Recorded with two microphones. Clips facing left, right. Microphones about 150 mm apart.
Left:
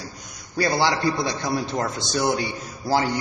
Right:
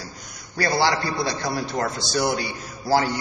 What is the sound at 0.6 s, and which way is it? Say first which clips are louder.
A man's voice: even; 20° left (ahead or behind).